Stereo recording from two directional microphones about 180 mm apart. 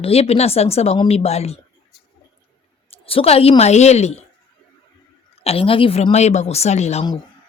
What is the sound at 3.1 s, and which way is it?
Speech, 30° left (ahead or behind).